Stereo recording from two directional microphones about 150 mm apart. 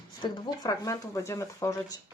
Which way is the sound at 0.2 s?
30° left (ahead or behind).